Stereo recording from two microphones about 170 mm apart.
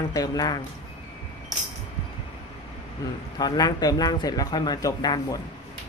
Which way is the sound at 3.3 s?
25° left (ahead or behind).